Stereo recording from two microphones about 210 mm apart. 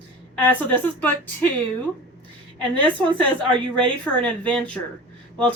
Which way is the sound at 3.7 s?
5° left (ahead or behind).